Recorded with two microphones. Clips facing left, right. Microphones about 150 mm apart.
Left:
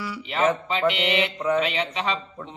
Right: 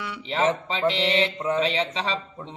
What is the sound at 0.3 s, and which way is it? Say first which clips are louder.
Mantra: left 1 dB; 30° right (ahead or behind).